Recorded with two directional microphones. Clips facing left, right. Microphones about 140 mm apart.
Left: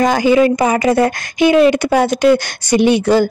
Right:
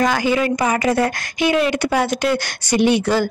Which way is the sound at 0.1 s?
20° left (ahead or behind).